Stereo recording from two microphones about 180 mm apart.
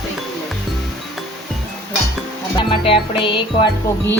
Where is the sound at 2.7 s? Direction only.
30° left (ahead or behind).